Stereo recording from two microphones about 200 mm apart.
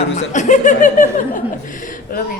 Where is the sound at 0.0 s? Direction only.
35° left (ahead or behind).